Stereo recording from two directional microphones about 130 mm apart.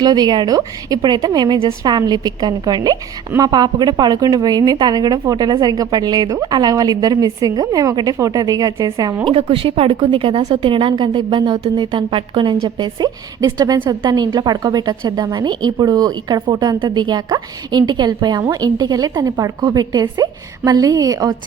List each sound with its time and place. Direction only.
0.0 s a woman's voice: 30° right (ahead or behind)
9.2 s a woman's voice: 45° right (ahead or behind); by 21.3 s 30° right (ahead or behind)